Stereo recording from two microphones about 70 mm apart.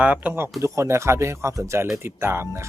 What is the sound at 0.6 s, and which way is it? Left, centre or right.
Speech, right.